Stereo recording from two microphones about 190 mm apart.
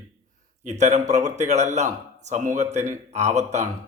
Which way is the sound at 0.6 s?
35° right (ahead or behind).